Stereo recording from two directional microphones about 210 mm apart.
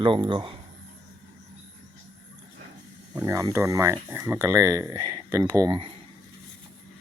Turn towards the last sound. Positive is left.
turn(degrees=-20)  # may be behind; listen again after turning